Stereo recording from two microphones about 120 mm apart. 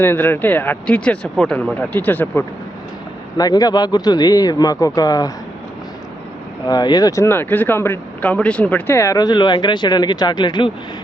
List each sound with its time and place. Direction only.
0.0 s speech: 20° left (ahead or behind)
3.3 s speech: 30° left (ahead or behind)
6.7 s speech: 35° left (ahead or behind)
7.3 s speech: 15° left (ahead or behind); by 10.7 s 40° left (ahead or behind)